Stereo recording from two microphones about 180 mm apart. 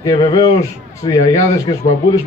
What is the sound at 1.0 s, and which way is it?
Speech, 20° left (ahead or behind).